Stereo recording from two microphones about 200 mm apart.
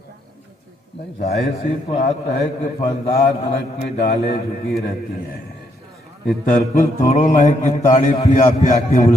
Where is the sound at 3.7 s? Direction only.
45° left (ahead or behind).